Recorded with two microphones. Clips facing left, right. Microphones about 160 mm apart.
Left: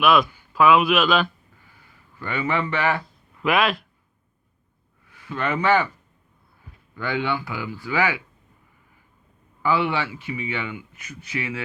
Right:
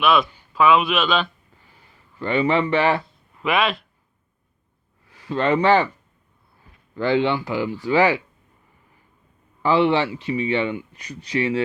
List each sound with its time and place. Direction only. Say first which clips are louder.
0.0 s a man's voice: even; centre (ahead or behind)
1.6 s a sound: right 1 dB; 25° right (ahead or behind)
3.4 s speech: even; centre (ahead or behind)
5.0 s speech: right 6 dB; 35° right (ahead or behind)
6.9 s speech: right 6 dB; 30° right (ahead or behind)
9.6 s speech: right 5 dB; 30° right (ahead or behind)